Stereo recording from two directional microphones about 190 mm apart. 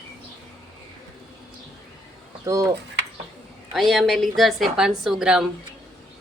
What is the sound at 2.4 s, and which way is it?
Speech, 15° right (ahead or behind).